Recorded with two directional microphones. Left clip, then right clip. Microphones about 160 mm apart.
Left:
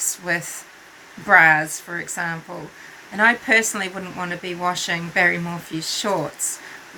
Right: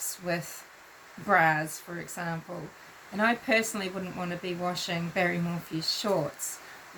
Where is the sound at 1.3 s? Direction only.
20° right (ahead or behind).